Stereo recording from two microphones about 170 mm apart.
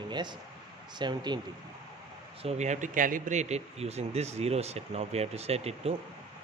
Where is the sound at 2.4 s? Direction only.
45° right (ahead or behind).